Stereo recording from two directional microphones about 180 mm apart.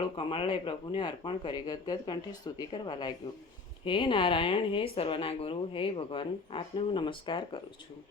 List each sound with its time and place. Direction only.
0.2 s speech: 30° left (ahead or behind)